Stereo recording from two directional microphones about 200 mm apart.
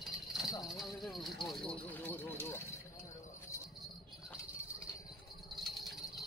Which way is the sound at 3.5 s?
15° left (ahead or behind).